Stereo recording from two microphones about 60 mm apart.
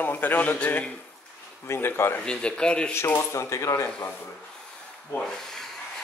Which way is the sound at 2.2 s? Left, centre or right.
Centre.